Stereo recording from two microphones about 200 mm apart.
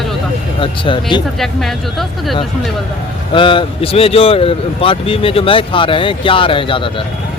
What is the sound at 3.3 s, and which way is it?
Speech, 25° left (ahead or behind).